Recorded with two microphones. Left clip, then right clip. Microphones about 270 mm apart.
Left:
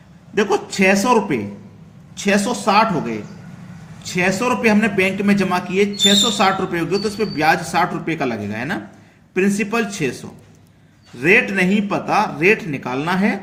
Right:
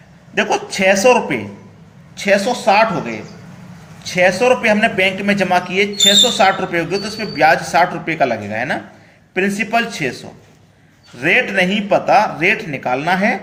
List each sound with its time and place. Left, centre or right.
1.0 s a man's voice: centre